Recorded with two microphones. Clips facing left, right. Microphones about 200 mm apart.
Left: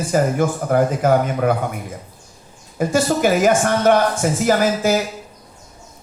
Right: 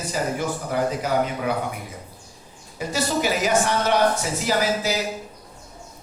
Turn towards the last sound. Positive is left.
turn(degrees=50)  # may be behind; listen again after turning